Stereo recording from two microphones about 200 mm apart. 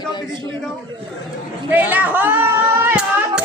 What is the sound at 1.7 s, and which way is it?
Speech, 10° right (ahead or behind).